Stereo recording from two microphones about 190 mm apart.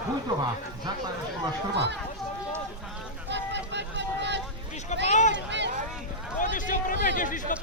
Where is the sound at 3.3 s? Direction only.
65° right (ahead or behind).